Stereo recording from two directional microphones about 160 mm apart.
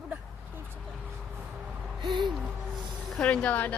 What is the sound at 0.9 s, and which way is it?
Vehicle, 5° right (ahead or behind).